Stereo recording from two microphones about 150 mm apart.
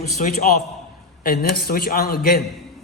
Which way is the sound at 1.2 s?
90° left.